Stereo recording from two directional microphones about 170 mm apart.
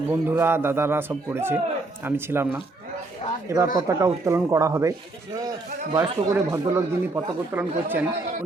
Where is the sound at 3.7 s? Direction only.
20° right (ahead or behind).